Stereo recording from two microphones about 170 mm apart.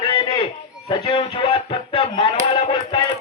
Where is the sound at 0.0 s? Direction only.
25° left (ahead or behind).